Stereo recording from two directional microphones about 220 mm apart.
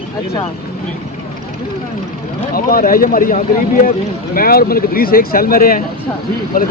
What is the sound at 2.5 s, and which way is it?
Speech, 40° left (ahead or behind).